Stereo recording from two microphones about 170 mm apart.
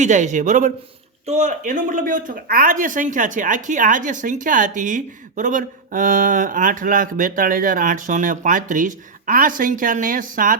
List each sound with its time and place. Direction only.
0.0 s speech: 45° right (ahead or behind)